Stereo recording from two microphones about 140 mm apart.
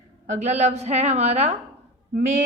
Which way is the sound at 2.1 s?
65° right (ahead or behind).